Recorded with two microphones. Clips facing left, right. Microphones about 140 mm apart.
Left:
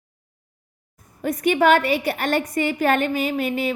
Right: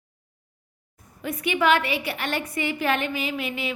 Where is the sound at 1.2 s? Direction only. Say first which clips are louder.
Left 5 dB; 45° left (ahead or behind).